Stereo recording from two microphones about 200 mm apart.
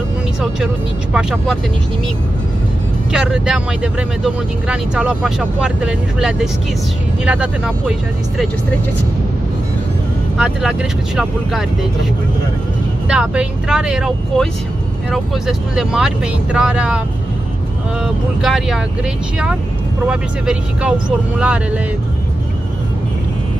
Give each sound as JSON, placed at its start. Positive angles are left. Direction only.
{"t": 1.1, "sound": "speech", "side_deg": 0}
{"t": 3.1, "sound": "speech", "side_deg": -5}
{"t": 10.3, "sound": "speech", "side_deg": -5}
{"t": 13.1, "sound": "speech", "side_deg": -5}
{"t": 18.0, "sound": "speech", "side_deg": 0}
{"t": 20.1, "sound": "speech", "side_deg": -5}